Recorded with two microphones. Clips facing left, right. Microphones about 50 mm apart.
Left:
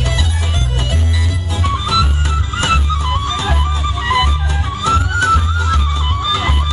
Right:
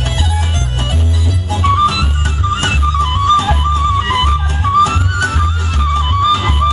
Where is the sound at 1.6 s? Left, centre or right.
Right.